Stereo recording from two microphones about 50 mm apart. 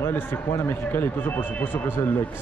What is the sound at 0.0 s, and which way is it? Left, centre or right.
Speech, left.